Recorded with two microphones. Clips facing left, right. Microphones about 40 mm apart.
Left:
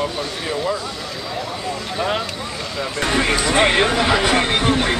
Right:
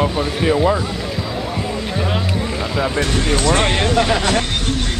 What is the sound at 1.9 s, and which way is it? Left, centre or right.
Speech, centre.